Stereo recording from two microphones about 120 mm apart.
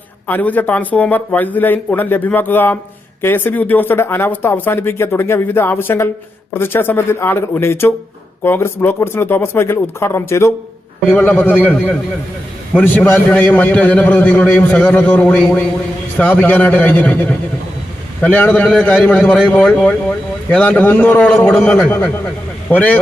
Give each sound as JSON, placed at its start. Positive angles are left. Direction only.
{"t": 0.3, "sound": "a man's voice", "side_deg": 15}